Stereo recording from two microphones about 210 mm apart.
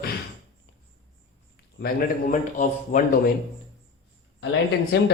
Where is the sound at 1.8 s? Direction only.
45° left (ahead or behind).